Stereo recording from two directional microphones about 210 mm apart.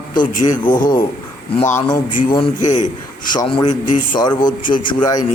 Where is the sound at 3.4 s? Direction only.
20° left (ahead or behind).